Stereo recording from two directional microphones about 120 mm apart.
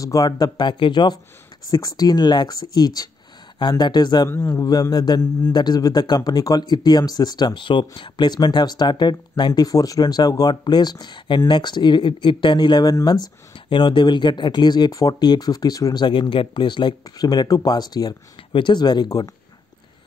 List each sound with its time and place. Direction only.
0.0 s speech: 30° left (ahead or behind)
4.3 s a man's voice: 25° left (ahead or behind)